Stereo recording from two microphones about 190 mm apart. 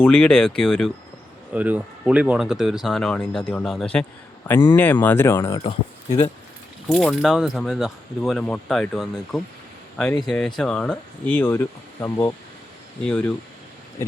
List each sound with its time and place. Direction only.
0.0 s speech: 5° left (ahead or behind)
1.5 s speech: 10° right (ahead or behind); by 5.7 s 15° left (ahead or behind)
6.1 s speech: 30° left (ahead or behind)
6.8 s speech: centre (ahead or behind)
13.1 s speech: 5° left (ahead or behind)